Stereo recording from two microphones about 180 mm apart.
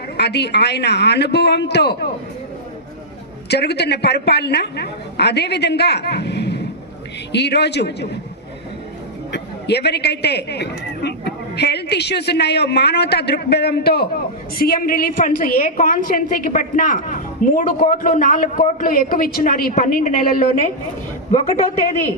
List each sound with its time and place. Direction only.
0.2 s a woman's voice: 65° left (ahead or behind)
3.5 s a woman's voice: 65° left (ahead or behind)
9.3 s a man's voice: 65° left (ahead or behind); by 20.4 s 50° left (ahead or behind)